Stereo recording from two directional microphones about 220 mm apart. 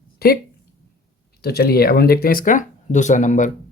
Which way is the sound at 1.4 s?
45° left (ahead or behind).